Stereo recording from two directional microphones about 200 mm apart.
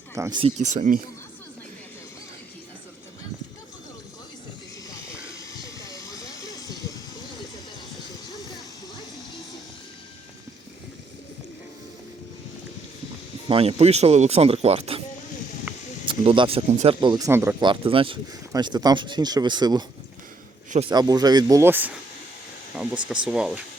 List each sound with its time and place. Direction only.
0.1 s speech: 20° right (ahead or behind)
0.5 s speech: 35° right (ahead or behind)
4.9 s hiss: 15° left (ahead or behind)
13.5 s speech: 30° right (ahead or behind)
16.0 s speech: 25° right (ahead or behind)
17.7 s speech: 25° right (ahead or behind)
20.9 s speech: 20° right (ahead or behind)
22.7 s a sound: 5° right (ahead or behind)
23.2 s speech: 5° right (ahead or behind)